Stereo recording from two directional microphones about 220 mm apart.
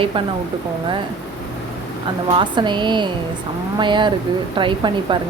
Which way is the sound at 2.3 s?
20° right (ahead or behind).